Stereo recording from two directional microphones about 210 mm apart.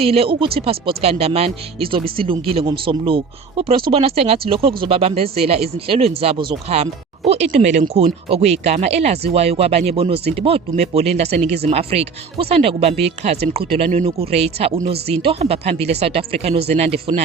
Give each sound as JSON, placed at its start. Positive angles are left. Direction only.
{"t": 0.0, "sound": "speech", "side_deg": -30}